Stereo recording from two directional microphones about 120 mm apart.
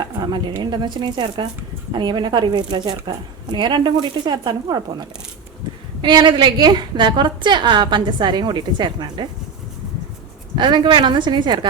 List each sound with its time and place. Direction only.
0.0 s a woman's voice: 35° right (ahead or behind)
10.5 s a woman's voice: 40° right (ahead or behind)